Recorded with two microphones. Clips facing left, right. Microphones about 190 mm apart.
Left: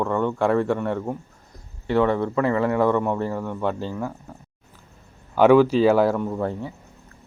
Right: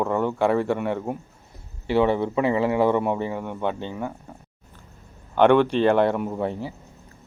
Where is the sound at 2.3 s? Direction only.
20° right (ahead or behind).